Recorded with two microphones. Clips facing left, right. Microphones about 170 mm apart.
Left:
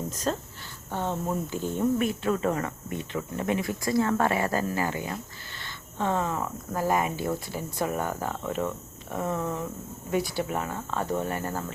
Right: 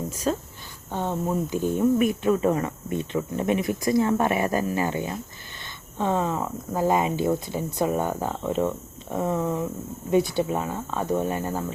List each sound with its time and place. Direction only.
0.1 s speech: 10° right (ahead or behind)